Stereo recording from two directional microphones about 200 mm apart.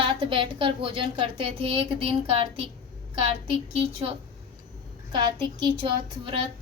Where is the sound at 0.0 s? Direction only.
25° right (ahead or behind).